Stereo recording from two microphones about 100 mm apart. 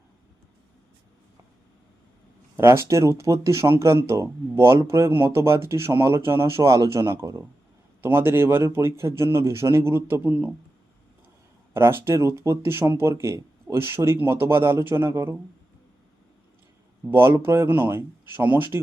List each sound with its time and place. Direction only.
2.6 s speech: 25° right (ahead or behind)
11.7 s speech: 25° right (ahead or behind)
17.1 s speech: 25° right (ahead or behind)